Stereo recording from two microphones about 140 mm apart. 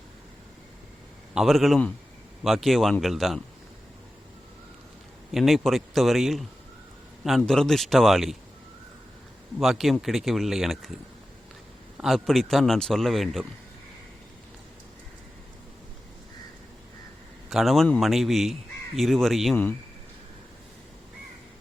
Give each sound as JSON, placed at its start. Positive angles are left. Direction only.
{"t": 1.3, "sound": "a man's voice", "side_deg": 0}
{"t": 5.3, "sound": "a man's voice", "side_deg": 0}
{"t": 9.6, "sound": "a man's voice", "side_deg": 0}
{"t": 11.9, "sound": "a man's voice", "side_deg": 0}
{"t": 17.5, "sound": "a man's voice", "side_deg": 0}